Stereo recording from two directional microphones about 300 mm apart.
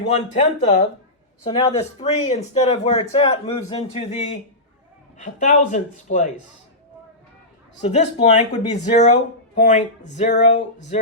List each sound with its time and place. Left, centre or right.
0.1 s speech: left
7.8 s speech: left